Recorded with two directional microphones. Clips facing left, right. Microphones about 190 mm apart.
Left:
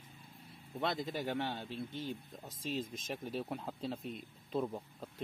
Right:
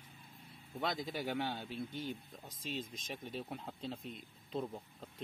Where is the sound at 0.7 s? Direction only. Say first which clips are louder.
Left 2 dB; centre (ahead or behind).